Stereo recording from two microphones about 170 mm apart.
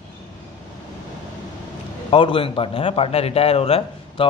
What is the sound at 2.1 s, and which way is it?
A man's voice, 30° left (ahead or behind).